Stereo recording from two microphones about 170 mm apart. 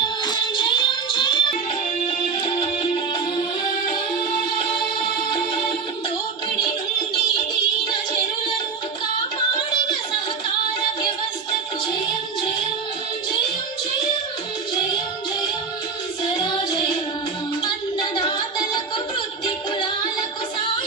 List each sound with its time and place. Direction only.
0.0 s music: 25° left (ahead or behind)
16.4 s child singing: 25° left (ahead or behind)
18.2 s music: 30° left (ahead or behind)